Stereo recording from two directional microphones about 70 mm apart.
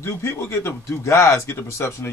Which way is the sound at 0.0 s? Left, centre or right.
Left.